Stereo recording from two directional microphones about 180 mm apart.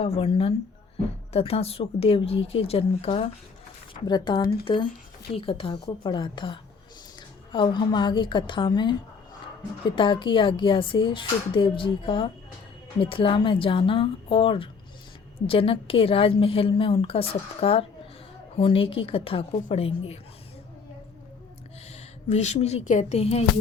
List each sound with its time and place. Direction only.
0.0 s a woman's voice: 35° left (ahead or behind)
22.3 s a woman's voice: 40° left (ahead or behind)